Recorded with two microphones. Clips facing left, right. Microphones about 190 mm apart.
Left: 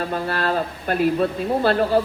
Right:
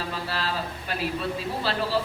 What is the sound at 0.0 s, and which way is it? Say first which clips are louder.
A man's voice: left 7 dB; 55° left (ahead or behind).